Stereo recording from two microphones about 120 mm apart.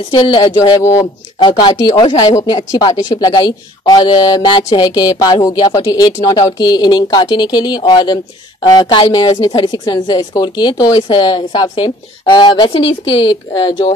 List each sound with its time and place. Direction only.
0.1 s speech: 40° left (ahead or behind)
13.5 s speech: 40° left (ahead or behind)